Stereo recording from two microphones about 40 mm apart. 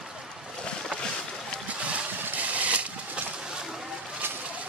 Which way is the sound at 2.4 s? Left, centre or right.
Right.